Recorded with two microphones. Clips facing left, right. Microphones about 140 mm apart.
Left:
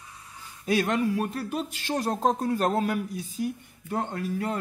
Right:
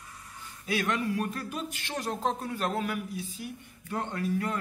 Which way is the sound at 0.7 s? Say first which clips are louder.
Left 5 dB; 35° left (ahead or behind).